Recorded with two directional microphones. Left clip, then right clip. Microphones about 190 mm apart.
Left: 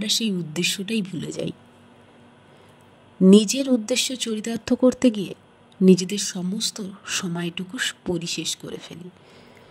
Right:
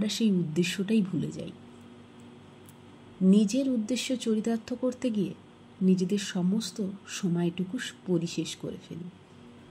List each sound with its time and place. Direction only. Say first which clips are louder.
0.0 s speech: left 5 dB; 55° left (ahead or behind)
3.3 s speech: left 9 dB; 60° left (ahead or behind)